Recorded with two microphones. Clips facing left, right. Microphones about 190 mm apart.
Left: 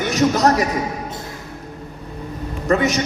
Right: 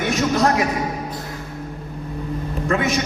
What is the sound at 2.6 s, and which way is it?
Speech, 40° left (ahead or behind).